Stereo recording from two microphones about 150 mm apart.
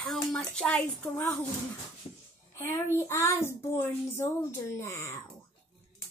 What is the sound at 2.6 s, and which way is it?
Speech, 15° left (ahead or behind).